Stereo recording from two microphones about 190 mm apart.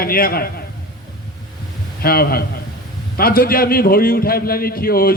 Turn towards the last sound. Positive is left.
turn(degrees=50)  # may be behind; listen again after turning